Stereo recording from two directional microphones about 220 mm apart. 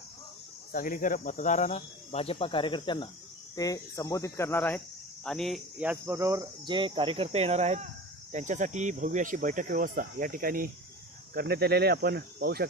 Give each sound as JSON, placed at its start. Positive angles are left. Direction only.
{"t": 0.7, "sound": "speech", "side_deg": 40}